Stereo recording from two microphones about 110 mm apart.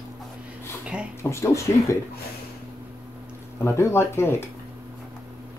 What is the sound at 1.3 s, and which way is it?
Speech, 25° left (ahead or behind).